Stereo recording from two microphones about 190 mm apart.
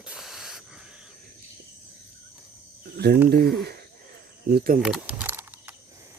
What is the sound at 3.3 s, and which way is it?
Speech, 55° right (ahead or behind).